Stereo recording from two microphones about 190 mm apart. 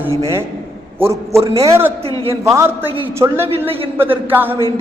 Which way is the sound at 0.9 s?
15° right (ahead or behind).